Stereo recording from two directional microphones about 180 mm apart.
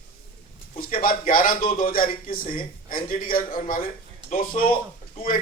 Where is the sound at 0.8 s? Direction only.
50° left (ahead or behind).